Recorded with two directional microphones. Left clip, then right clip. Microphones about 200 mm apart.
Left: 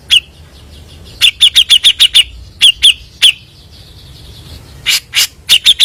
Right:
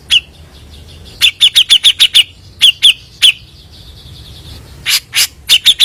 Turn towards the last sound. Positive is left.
turn(degrees=-5)  # may be behind; listen again after turning